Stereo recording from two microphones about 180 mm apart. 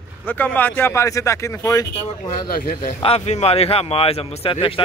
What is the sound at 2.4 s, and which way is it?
Speech, 55° left (ahead or behind).